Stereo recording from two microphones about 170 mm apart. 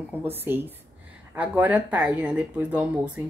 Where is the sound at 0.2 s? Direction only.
10° right (ahead or behind).